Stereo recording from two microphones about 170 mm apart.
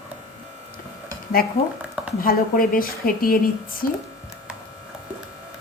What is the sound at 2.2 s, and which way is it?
Speech, 60° left (ahead or behind).